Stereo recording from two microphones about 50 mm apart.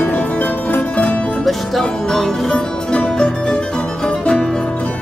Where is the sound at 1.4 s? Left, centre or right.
Centre.